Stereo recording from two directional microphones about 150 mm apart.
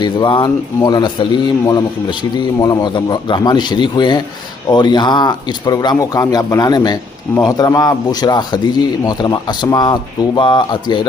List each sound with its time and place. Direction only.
0.0 s a man's voice: 30° left (ahead or behind)